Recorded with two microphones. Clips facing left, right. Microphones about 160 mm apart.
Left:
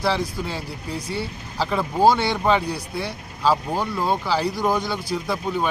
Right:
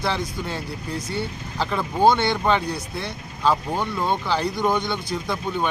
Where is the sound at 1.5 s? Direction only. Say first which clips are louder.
Left 1 dB; 5° left (ahead or behind).